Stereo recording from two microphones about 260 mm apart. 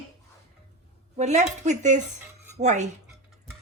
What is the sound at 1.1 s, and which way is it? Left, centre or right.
Speech, right.